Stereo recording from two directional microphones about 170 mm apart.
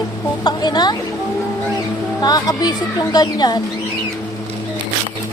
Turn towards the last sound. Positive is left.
turn(degrees=25)  # may be behind; listen again after turning